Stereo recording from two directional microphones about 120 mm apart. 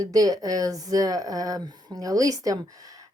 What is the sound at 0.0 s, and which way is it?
Speech, 30° right (ahead or behind).